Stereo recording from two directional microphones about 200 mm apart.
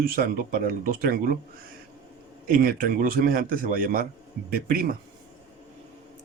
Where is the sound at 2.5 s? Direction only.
45° right (ahead or behind).